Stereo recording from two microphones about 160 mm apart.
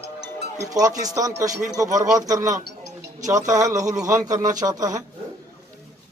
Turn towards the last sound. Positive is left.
turn(degrees=-20)  # may be behind; listen again after turning